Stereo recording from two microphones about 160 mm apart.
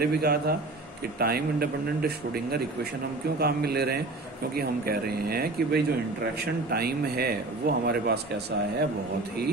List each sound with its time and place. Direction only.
0.0 s a man's voice: 75° right (ahead or behind); by 8.8 s 90° right